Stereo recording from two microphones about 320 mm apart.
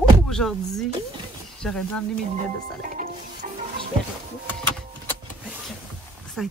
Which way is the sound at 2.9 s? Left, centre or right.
Right.